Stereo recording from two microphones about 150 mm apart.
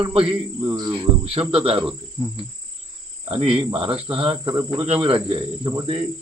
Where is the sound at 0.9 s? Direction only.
40° right (ahead or behind).